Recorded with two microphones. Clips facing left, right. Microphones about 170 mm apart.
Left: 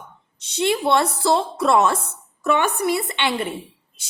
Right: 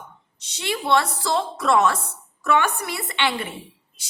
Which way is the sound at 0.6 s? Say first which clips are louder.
Left 3 dB; 25° left (ahead or behind).